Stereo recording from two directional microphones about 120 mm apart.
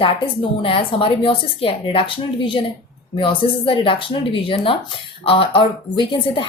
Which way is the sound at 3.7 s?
45° left (ahead or behind).